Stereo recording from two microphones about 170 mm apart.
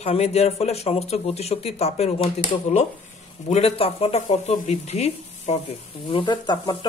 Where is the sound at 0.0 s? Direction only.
40° left (ahead or behind).